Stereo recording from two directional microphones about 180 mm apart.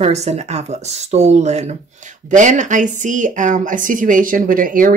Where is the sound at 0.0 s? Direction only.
40° right (ahead or behind).